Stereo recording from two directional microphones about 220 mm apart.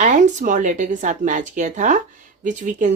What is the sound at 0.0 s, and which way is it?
Speech, 35° right (ahead or behind).